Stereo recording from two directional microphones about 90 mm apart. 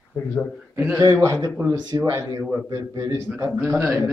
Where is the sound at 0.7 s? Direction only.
20° right (ahead or behind).